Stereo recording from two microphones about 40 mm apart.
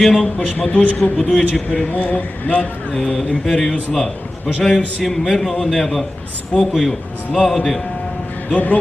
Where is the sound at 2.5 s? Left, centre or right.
Left.